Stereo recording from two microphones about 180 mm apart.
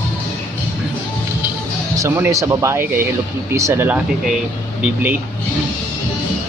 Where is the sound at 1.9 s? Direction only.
15° right (ahead or behind).